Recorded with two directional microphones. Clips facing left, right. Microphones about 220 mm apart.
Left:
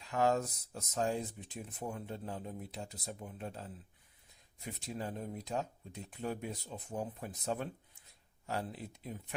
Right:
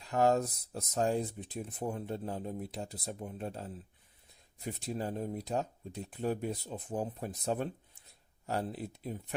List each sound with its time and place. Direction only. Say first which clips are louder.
0.1 s speech: right 4 dB; 40° right (ahead or behind)